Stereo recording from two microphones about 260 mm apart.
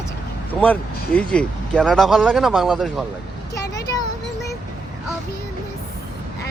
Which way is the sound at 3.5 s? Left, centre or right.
Centre.